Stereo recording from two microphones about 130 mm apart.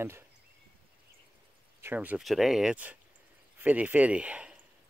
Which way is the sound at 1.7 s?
15° right (ahead or behind).